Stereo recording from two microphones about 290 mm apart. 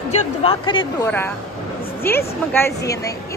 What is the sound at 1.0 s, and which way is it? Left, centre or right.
A woman's voice, centre.